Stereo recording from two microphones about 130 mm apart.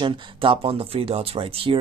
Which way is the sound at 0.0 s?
40° right (ahead or behind).